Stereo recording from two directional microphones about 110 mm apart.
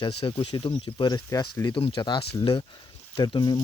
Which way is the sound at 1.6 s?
50° left (ahead or behind).